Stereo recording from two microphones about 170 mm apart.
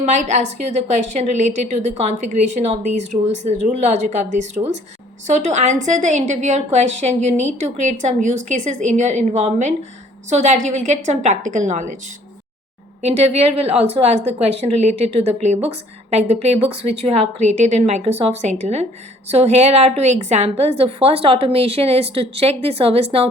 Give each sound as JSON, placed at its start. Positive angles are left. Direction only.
{"t": 0.0, "sound": "a woman's voice", "side_deg": -45}
{"t": 13.0, "sound": "a woman's voice", "side_deg": -40}